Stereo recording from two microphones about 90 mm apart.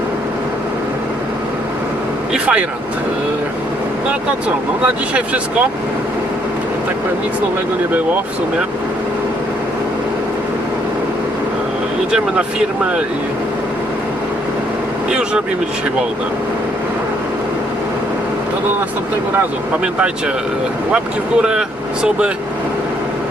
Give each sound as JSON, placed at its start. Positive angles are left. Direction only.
{"t": 2.3, "sound": "vehicle", "side_deg": -15}
{"t": 5.1, "sound": "speech", "side_deg": -15}
{"t": 15.1, "sound": "speech", "side_deg": -10}